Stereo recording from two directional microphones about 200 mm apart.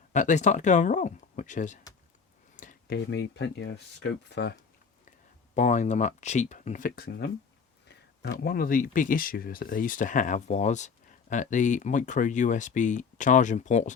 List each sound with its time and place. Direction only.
0.1 s speech: 35° left (ahead or behind); by 4.5 s 60° left (ahead or behind)
5.5 s speech: 35° left (ahead or behind)